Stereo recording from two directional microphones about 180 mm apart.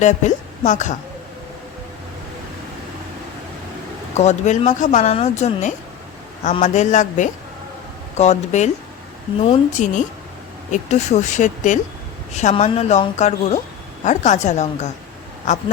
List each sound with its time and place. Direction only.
0.0 s speech: 40° left (ahead or behind)
4.2 s speech: 40° left (ahead or behind)
9.7 s speech: 45° left (ahead or behind)